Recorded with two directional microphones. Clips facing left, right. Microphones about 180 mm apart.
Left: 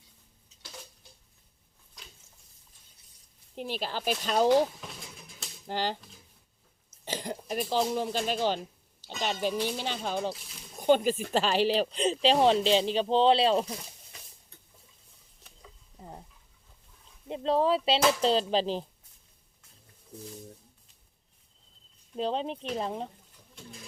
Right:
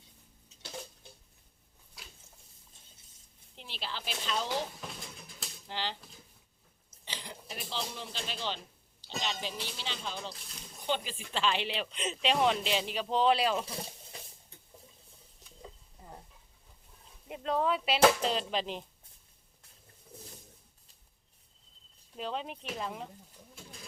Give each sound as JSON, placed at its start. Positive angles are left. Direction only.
{"t": 2.0, "sound": "a sound", "side_deg": -5}
{"t": 3.5, "sound": "speech", "side_deg": 45}
{"t": 5.6, "sound": "speech", "side_deg": 45}
{"t": 7.0, "sound": "speech", "side_deg": 45}
{"t": 10.3, "sound": "speech", "side_deg": 5}
{"t": 10.8, "sound": "speech", "side_deg": 45}
{"t": 17.2, "sound": "speech", "side_deg": 30}
{"t": 22.2, "sound": "speech", "side_deg": 30}